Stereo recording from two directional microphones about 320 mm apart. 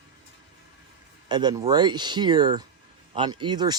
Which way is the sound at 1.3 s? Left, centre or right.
Centre.